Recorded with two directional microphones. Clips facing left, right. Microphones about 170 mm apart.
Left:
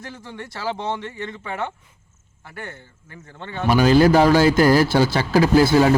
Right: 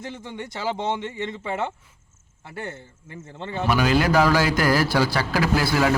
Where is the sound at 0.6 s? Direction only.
20° right (ahead or behind).